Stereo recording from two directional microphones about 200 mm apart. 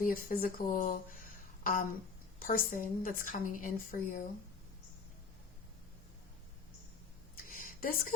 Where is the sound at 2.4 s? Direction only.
45° left (ahead or behind).